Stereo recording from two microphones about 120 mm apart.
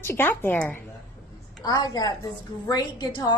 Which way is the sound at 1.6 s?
35° left (ahead or behind).